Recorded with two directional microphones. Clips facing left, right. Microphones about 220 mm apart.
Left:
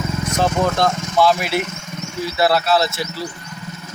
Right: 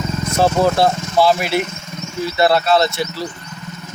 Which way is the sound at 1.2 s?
Centre (ahead or behind).